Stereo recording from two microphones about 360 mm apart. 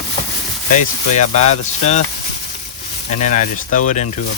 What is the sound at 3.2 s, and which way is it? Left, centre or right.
Speech, centre.